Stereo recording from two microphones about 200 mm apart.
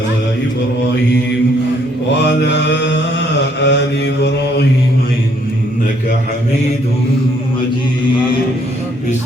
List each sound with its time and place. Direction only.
2.4 s mantra: 60° left (ahead or behind)